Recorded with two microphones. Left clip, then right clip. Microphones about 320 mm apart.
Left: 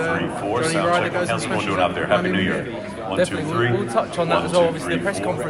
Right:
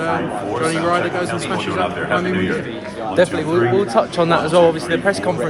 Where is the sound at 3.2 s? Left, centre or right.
Right.